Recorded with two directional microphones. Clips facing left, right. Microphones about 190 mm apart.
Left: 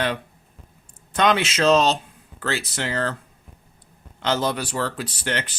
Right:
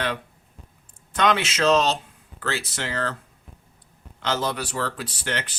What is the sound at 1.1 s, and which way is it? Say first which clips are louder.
Speech: left 2 dB; 25° left (ahead or behind).